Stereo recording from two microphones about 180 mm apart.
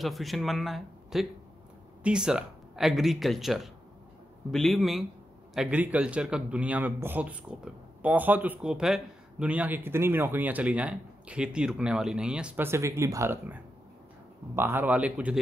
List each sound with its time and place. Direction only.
0.0 s speech: centre (ahead or behind)